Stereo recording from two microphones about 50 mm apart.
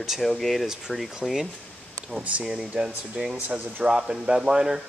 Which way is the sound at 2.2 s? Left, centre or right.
Right.